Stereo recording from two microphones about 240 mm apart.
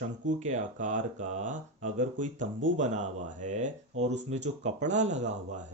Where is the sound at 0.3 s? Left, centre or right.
Right.